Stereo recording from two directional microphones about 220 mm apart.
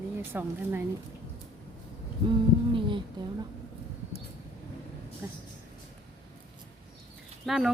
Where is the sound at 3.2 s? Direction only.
20° right (ahead or behind).